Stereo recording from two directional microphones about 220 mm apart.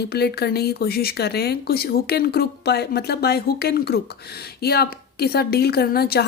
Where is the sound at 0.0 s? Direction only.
45° left (ahead or behind).